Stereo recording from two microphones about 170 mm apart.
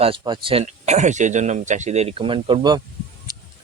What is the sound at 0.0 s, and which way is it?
Speech, 30° right (ahead or behind).